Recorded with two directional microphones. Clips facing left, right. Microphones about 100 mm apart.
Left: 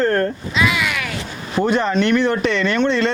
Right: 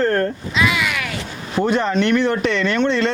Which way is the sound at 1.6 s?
25° left (ahead or behind).